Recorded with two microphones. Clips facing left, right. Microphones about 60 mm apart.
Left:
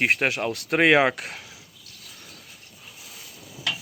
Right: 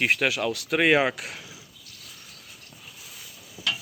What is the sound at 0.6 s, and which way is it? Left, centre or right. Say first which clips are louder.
Speech: left 3 dB; left.